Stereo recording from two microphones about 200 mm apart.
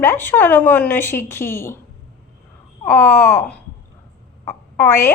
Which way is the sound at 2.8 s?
10° left (ahead or behind).